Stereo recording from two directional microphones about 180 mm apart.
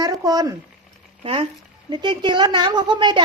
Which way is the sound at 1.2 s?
30° right (ahead or behind).